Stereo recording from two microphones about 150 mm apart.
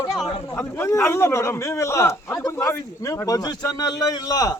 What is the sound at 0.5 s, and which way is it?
A man's voice, 20° left (ahead or behind).